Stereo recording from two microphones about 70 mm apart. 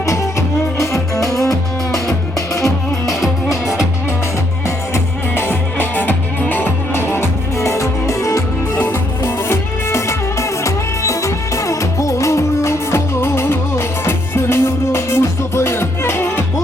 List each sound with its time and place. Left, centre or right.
0.0 s music: left
5.4 s music: left
8.7 s music: left